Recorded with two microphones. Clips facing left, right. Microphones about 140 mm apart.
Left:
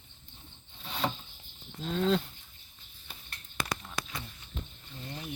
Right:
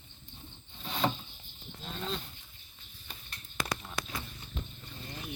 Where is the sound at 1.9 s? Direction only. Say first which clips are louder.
Left 11 dB; 90° left.